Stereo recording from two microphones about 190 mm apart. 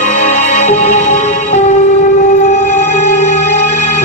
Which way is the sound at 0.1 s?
35° left (ahead or behind).